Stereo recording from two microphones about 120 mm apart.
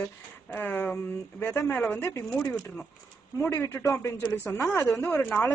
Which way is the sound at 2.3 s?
5° left (ahead or behind).